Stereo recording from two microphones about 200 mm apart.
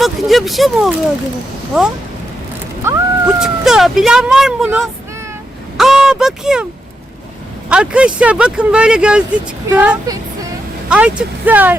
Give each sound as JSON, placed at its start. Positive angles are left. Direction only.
{"t": 0.0, "sound": "speech", "side_deg": 0}
{"t": 7.7, "sound": "speech", "side_deg": -5}